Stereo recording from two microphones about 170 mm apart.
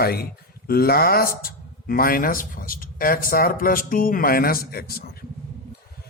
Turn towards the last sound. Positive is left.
turn(degrees=65)  # may be behind; listen again after turning